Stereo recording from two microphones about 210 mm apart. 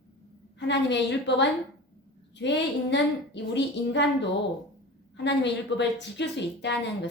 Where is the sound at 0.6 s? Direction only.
55° left (ahead or behind).